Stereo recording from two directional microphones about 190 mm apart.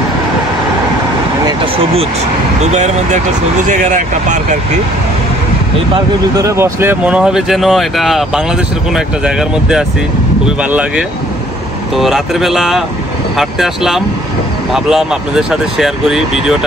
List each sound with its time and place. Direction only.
2.6 s speech: 35° right (ahead or behind)
5.9 s speech: 15° right (ahead or behind)